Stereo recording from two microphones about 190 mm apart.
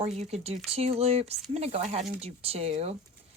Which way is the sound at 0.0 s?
35° right (ahead or behind).